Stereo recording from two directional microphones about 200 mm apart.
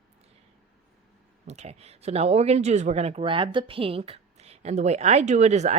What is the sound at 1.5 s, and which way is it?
Speech, 30° right (ahead or behind).